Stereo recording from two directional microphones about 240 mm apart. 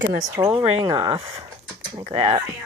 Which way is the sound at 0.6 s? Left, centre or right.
Right.